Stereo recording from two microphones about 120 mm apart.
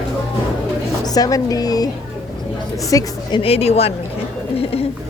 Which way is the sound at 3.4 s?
60° left (ahead or behind).